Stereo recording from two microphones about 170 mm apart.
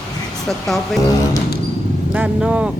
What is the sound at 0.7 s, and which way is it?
Speech, centre (ahead or behind).